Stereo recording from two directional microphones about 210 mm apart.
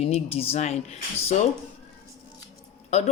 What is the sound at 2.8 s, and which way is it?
Speech, 30° left (ahead or behind).